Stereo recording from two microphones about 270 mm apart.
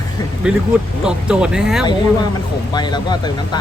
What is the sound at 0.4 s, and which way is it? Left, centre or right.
Speech, centre.